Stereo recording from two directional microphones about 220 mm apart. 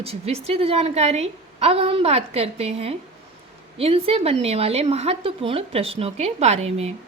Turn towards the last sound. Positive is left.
turn(degrees=-30)  # may be behind; listen again after turning